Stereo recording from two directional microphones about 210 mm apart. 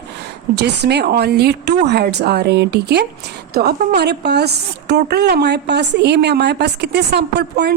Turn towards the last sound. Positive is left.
turn(degrees=-50)  # may be behind; listen again after turning